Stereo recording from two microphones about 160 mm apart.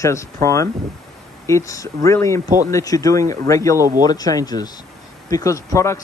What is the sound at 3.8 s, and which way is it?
Speech, 20° right (ahead or behind).